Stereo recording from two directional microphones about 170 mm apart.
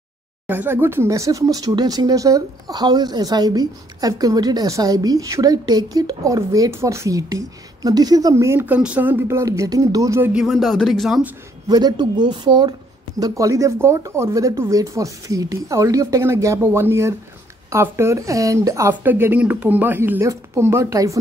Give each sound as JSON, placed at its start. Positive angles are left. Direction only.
{"t": 0.5, "sound": "speech", "side_deg": -10}
{"t": 10.3, "sound": "speech", "side_deg": 0}
{"t": 11.6, "sound": "speech", "side_deg": -25}